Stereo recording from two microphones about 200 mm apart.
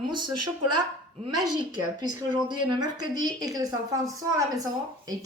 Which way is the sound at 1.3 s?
20° right (ahead or behind).